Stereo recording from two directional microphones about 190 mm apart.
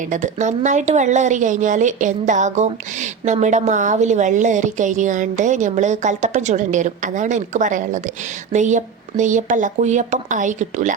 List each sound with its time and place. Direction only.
0.1 s speech: 40° right (ahead or behind)